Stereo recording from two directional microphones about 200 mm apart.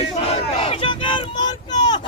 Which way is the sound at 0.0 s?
30° left (ahead or behind).